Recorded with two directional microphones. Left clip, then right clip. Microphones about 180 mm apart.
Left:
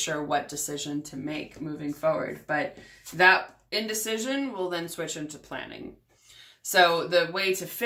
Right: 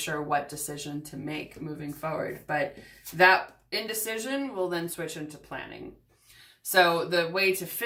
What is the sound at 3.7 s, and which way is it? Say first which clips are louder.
Speech: left 3 dB; 15° left (ahead or behind).